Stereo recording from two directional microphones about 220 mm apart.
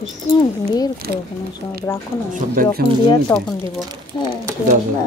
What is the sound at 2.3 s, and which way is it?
Speech, 40° right (ahead or behind).